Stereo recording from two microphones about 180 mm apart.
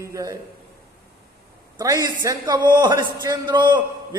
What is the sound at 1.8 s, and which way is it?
A man's voice, 20° right (ahead or behind).